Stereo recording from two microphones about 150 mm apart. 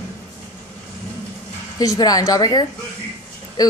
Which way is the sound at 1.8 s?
25° left (ahead or behind).